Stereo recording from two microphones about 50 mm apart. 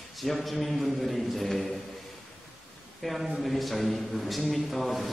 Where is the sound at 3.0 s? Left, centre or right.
Centre.